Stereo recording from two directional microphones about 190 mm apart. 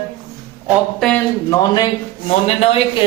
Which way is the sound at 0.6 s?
Centre (ahead or behind).